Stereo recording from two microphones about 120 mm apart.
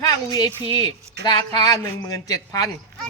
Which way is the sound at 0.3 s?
35° left (ahead or behind).